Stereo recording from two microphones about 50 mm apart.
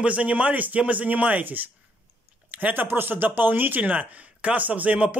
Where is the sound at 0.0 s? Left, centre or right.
Right.